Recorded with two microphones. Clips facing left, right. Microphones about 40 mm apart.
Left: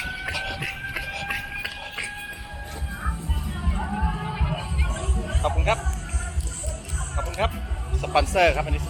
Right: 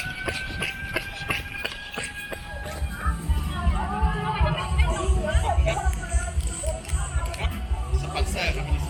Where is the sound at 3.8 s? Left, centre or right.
Centre.